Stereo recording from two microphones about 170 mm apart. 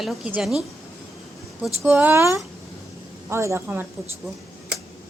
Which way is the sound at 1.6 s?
10° right (ahead or behind).